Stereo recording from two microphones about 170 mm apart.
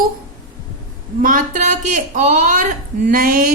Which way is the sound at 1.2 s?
50° right (ahead or behind).